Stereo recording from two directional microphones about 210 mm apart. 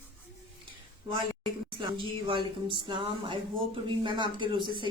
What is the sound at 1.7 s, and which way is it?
Speech, 25° right (ahead or behind).